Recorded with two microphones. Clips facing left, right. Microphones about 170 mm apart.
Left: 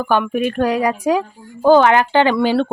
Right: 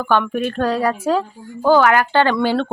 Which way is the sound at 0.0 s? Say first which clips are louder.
Left 1 dB; 10° left (ahead or behind).